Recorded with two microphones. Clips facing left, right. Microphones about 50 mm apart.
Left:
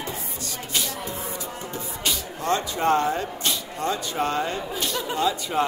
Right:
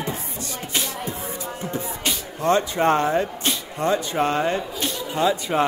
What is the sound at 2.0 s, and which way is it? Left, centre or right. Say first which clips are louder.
Speech: right 4 dB; right.